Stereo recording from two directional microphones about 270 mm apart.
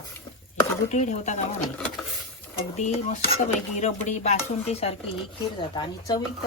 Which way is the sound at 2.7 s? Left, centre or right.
Left.